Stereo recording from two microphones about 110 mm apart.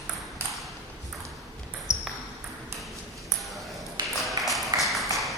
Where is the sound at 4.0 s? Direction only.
40° right (ahead or behind).